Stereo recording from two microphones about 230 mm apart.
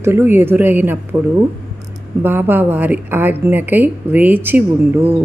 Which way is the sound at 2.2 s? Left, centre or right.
Centre.